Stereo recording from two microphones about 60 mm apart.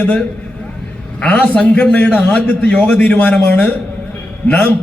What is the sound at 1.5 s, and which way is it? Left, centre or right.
A man's voice, left.